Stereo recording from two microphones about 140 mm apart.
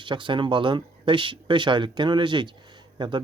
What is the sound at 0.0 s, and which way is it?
Speech, 35° right (ahead or behind).